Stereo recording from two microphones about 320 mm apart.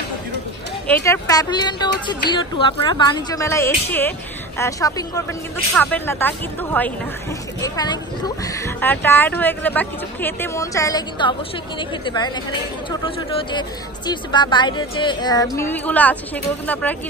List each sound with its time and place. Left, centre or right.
0.8 s speech: centre